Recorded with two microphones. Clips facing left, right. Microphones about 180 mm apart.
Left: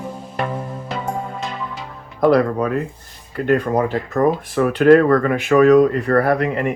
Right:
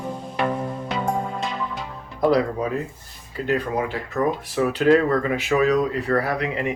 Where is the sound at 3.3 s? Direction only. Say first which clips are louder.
Left 6 dB; 55° left (ahead or behind).